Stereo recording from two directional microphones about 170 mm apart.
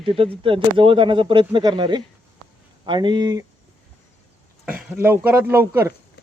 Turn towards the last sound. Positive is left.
turn(degrees=-15)  # may be behind; listen again after turning